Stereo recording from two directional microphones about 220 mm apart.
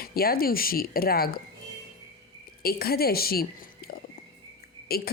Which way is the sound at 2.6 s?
45° left (ahead or behind).